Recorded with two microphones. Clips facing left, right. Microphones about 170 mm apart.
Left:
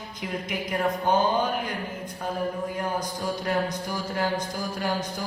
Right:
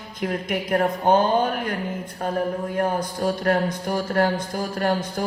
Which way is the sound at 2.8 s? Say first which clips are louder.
Right 6 dB; 55° right (ahead or behind).